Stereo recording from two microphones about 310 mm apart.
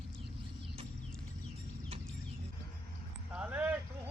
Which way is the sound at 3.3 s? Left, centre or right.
Centre.